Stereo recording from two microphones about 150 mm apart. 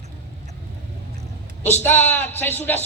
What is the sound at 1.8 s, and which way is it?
Speech, 10° left (ahead or behind).